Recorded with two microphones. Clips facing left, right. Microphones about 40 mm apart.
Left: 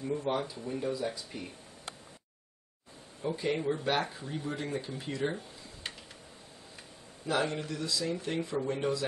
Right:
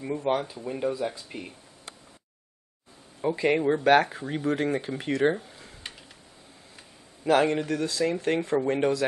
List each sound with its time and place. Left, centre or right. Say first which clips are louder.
0.0 s speech: right 5 dB; right
3.3 s speech: right 8 dB; right
7.2 s speech: right 9 dB; right